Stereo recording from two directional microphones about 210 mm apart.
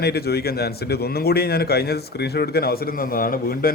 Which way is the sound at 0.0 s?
50° left (ahead or behind).